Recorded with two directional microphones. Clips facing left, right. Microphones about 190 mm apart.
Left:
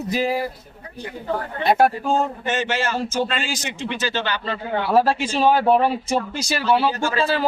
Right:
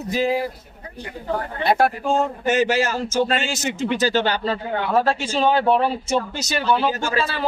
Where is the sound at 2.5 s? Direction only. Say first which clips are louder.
Right 4 dB; 40° right (ahead or behind).